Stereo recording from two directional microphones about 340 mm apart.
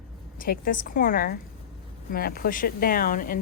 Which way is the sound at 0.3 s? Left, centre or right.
Left.